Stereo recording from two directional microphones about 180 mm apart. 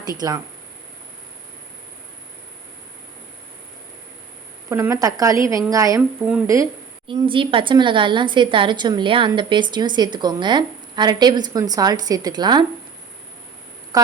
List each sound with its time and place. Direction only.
0.2 s a woman's voice: 20° right (ahead or behind)
4.7 s a woman's voice: 15° right (ahead or behind)
7.1 s a woman's voice: 30° right (ahead or behind)
13.9 s a sound: 20° right (ahead or behind)